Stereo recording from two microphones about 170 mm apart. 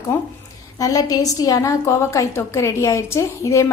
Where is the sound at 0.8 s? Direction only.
20° left (ahead or behind).